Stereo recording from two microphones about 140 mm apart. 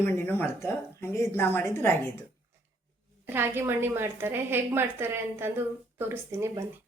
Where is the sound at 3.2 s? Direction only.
15° right (ahead or behind).